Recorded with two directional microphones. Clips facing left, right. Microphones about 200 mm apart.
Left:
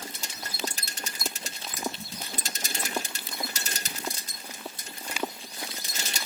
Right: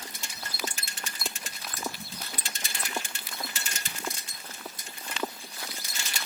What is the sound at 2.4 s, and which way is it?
Sewing machine, 40° left (ahead or behind).